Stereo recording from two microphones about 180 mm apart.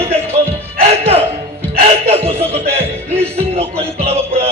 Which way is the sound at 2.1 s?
35° right (ahead or behind).